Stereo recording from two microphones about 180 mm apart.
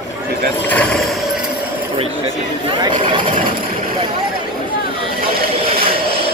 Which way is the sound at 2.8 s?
25° right (ahead or behind).